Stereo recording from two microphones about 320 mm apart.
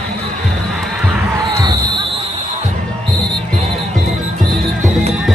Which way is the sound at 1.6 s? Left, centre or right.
Centre.